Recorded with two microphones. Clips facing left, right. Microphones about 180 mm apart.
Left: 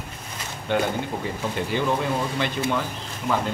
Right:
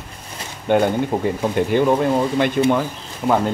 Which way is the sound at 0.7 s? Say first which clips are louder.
Right 8 dB; 55° right (ahead or behind).